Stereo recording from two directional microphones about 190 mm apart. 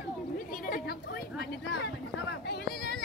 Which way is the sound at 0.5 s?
50° left (ahead or behind).